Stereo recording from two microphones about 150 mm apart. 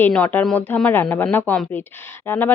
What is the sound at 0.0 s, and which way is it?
Speech, 10° left (ahead or behind).